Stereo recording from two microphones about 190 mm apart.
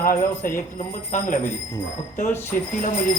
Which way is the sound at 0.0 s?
45° left (ahead or behind).